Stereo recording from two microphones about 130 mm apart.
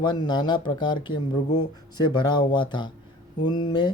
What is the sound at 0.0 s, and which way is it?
Speech, 35° left (ahead or behind).